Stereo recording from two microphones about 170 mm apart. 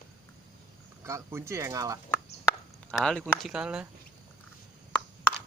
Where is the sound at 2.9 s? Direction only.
5° left (ahead or behind).